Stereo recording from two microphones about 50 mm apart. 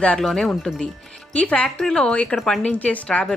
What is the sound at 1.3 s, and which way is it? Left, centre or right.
Speech, left.